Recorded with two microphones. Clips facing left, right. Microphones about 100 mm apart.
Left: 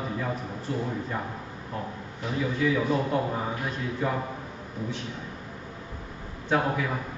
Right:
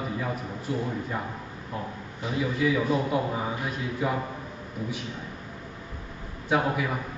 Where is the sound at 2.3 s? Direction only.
5° right (ahead or behind).